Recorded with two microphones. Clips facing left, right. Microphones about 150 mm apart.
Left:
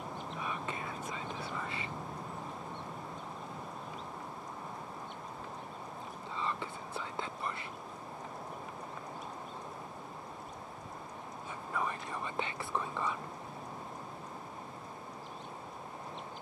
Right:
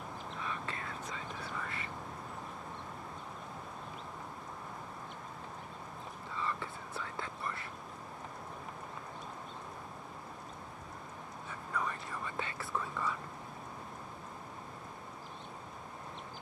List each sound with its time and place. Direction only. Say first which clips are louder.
0.4 s whispering: left 2 dB; 15° left (ahead or behind)
6.3 s whispering: left 1 dB; 25° left (ahead or behind)
11.7 s whispering: left 1 dB; 20° left (ahead or behind)